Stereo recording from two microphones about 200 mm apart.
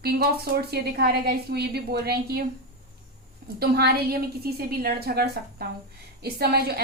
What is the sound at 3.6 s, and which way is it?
A woman's voice, 50° right (ahead or behind).